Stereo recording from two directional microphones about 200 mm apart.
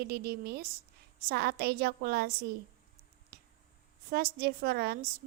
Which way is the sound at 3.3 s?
55° right (ahead or behind).